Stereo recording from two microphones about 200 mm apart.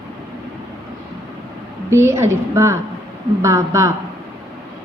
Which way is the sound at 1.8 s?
15° right (ahead or behind).